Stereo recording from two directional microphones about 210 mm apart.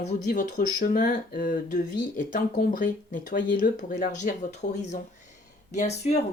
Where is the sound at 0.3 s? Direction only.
40° left (ahead or behind).